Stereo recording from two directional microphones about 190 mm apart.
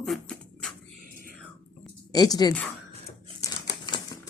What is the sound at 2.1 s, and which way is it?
Speech, 20° left (ahead or behind).